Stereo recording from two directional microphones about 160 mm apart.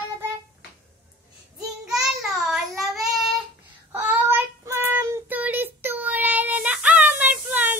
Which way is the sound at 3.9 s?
15° right (ahead or behind).